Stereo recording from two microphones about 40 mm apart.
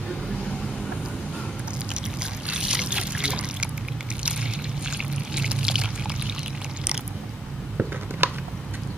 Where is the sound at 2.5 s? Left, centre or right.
Centre.